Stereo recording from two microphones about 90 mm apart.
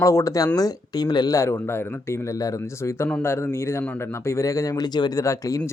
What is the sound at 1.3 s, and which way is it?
Speech, 35° left (ahead or behind).